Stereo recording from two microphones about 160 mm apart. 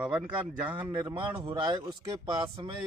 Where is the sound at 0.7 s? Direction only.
25° right (ahead or behind).